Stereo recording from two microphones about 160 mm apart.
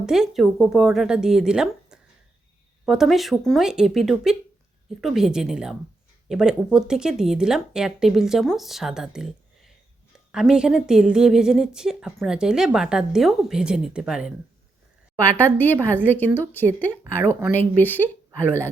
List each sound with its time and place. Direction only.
0.0 s a woman's voice: 5° right (ahead or behind)
15.8 s speech: 15° right (ahead or behind)
16.0 s speech: 10° left (ahead or behind)
16.9 s speech: 15° right (ahead or behind)
17.5 s speech: 10° left (ahead or behind)